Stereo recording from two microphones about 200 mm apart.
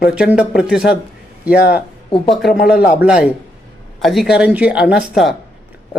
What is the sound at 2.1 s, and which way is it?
Speech, 25° left (ahead or behind).